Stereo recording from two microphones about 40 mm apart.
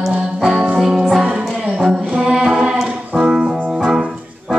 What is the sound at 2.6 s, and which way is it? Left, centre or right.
Music, centre.